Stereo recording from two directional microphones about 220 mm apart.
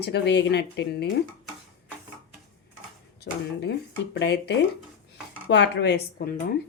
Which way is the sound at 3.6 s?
50° left (ahead or behind).